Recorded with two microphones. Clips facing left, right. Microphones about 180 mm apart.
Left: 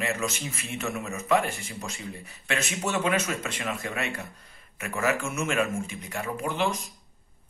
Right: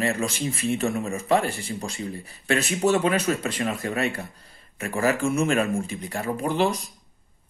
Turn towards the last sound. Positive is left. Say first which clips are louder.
# right 5 dB
turn(degrees=-35)  # may be behind; listen again after turning